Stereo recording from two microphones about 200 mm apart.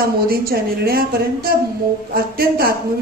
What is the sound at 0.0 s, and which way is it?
Speech, 50° right (ahead or behind).